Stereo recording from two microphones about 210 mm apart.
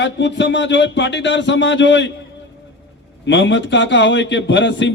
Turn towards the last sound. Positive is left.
turn(degrees=60)  # may be behind; listen again after turning